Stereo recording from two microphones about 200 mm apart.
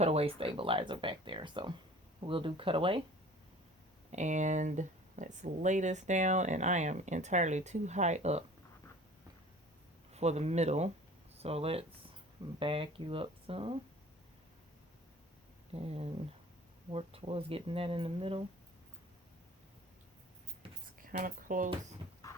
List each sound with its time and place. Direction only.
0.0 s speech: 30° right (ahead or behind)
4.1 s speech: 35° right (ahead or behind)
10.1 s speech: 35° right (ahead or behind)
15.7 s speech: 30° right (ahead or behind)
21.0 s speech: 45° right (ahead or behind)
22.3 s heart murmur: 15° left (ahead or behind)